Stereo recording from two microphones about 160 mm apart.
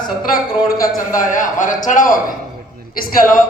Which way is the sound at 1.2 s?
55° left (ahead or behind).